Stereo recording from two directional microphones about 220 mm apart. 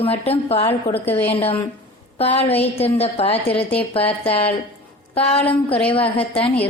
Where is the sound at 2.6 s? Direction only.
25° left (ahead or behind).